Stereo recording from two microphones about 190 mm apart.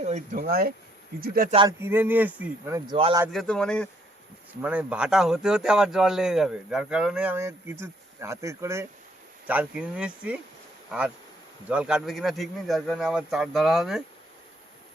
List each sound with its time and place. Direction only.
0.3 s speech: 50° right (ahead or behind)
1.6 s speech: 10° right (ahead or behind)
2.9 s speech: 25° right (ahead or behind)
3.3 s speech: 5° left (ahead or behind)
4.6 s speech: 5° right (ahead or behind)
11.7 s speech: 5° right (ahead or behind)